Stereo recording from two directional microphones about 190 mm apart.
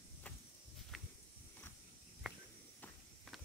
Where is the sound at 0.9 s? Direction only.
Centre (ahead or behind).